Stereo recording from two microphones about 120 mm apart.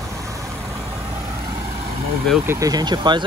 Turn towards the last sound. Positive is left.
turn(degrees=-40)  # may be behind; listen again after turning